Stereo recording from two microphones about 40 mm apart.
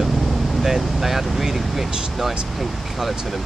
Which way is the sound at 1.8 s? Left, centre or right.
Right.